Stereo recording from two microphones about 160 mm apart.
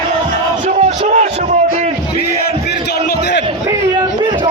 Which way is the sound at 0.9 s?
45° right (ahead or behind).